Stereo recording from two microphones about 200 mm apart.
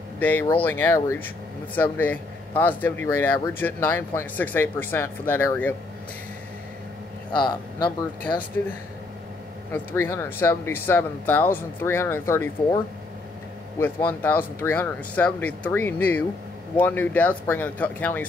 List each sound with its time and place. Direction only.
0.2 s speech: 10° left (ahead or behind)
7.3 s speech: 20° left (ahead or behind)
9.7 s speech: 10° left (ahead or behind)
14.0 s speech: 10° left (ahead or behind)